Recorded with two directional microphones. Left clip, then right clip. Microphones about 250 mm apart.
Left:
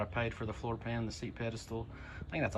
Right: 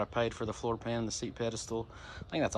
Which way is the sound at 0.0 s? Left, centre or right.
Centre.